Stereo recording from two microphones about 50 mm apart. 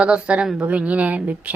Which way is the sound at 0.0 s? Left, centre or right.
Right.